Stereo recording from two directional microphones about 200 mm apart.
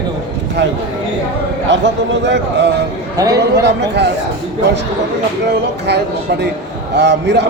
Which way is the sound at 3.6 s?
55° right (ahead or behind).